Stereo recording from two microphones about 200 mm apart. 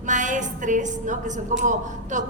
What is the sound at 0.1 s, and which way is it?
A woman's voice, 40° right (ahead or behind).